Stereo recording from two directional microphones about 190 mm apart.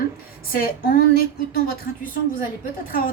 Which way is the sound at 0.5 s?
50° left (ahead or behind).